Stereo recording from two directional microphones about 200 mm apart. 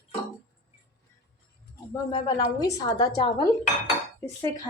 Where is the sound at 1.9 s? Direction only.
20° left (ahead or behind).